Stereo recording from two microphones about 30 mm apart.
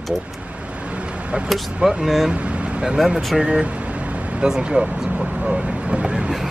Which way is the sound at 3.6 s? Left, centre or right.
Right.